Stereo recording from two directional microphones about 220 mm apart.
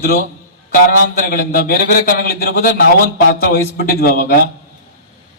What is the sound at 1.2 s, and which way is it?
A man's voice, 40° left (ahead or behind).